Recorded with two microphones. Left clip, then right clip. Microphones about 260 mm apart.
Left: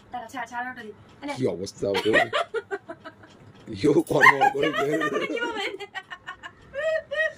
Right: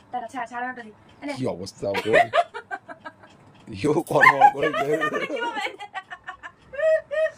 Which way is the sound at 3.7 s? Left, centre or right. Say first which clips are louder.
Even; centre.